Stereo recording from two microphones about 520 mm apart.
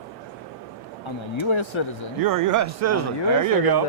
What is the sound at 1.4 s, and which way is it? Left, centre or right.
Speech, left.